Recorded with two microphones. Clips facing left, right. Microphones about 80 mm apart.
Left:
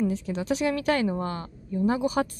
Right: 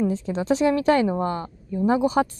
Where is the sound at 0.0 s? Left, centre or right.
Right.